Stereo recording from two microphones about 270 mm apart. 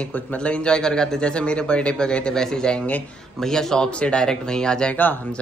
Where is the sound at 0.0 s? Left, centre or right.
Centre.